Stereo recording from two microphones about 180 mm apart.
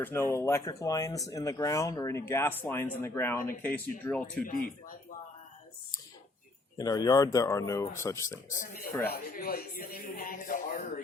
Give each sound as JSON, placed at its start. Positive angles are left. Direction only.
{"t": 0.0, "sound": "speech", "side_deg": 10}
{"t": 4.4, "sound": "speech", "side_deg": 55}
{"t": 6.7, "sound": "speech", "side_deg": 20}
{"t": 8.4, "sound": "speech", "side_deg": 45}
{"t": 8.9, "sound": "speech", "side_deg": 15}
{"t": 9.1, "sound": "speech", "side_deg": 55}